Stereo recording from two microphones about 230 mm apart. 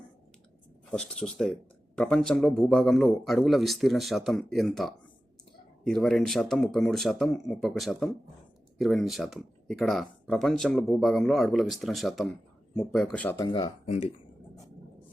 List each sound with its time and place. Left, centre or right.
0.9 s speech: centre
13.5 s speech: left